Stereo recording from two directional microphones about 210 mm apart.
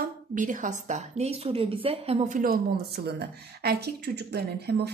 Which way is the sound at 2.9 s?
50° right (ahead or behind).